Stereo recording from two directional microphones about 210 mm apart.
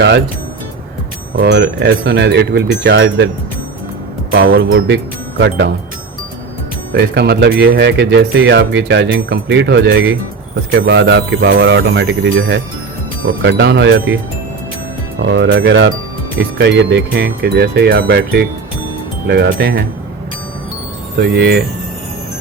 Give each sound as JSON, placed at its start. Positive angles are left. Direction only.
{"t": 1.4, "sound": "speech", "side_deg": -55}
{"t": 4.3, "sound": "speech", "side_deg": -70}
{"t": 6.9, "sound": "speech", "side_deg": -50}
{"t": 15.2, "sound": "speech", "side_deg": -55}
{"t": 21.2, "sound": "speech", "side_deg": -50}